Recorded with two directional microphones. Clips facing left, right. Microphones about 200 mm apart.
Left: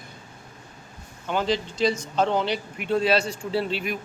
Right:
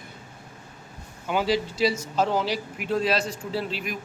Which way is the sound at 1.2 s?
5° right (ahead or behind).